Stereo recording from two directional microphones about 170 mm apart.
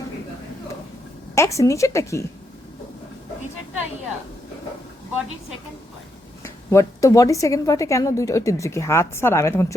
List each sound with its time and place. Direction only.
1.4 s a woman's voice: 20° left (ahead or behind)
6.4 s a woman's voice: 15° left (ahead or behind)